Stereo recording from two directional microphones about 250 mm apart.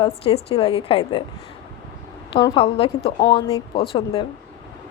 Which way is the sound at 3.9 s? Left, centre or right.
Left.